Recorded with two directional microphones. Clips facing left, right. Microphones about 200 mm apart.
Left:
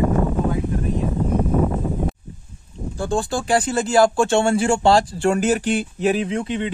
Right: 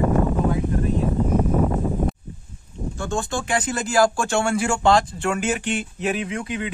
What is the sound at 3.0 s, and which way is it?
Speech, 35° left (ahead or behind).